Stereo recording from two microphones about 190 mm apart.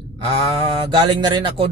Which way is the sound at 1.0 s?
25° right (ahead or behind).